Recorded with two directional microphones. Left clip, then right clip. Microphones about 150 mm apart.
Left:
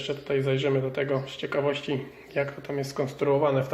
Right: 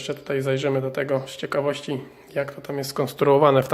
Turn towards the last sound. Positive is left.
turn(degrees=-70)  # may be behind; listen again after turning